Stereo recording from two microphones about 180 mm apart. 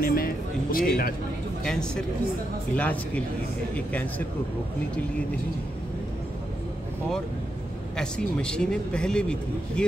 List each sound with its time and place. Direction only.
0.0 s a sound: 55° left (ahead or behind)
1.6 s speech: 5° left (ahead or behind)
8.0 s speech: 5° left (ahead or behind)